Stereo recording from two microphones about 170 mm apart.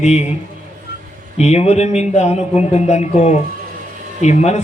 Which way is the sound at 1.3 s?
40° left (ahead or behind).